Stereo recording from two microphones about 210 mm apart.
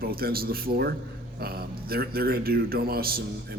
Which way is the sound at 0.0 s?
45° right (ahead or behind).